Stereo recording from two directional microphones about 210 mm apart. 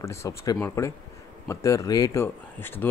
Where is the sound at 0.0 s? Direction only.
15° left (ahead or behind).